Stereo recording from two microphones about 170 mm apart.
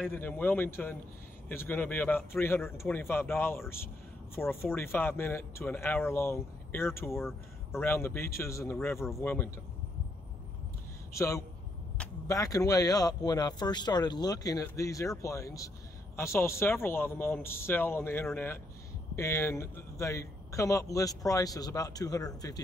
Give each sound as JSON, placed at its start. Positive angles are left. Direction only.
{"t": 0.1, "sound": "speech", "side_deg": 10}
{"t": 11.1, "sound": "a man's voice", "side_deg": 15}